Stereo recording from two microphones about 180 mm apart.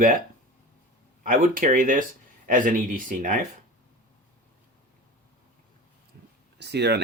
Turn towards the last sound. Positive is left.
turn(degrees=-70)  # may be behind; listen again after turning